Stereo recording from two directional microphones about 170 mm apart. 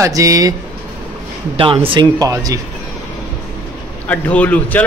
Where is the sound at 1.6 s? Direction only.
30° right (ahead or behind).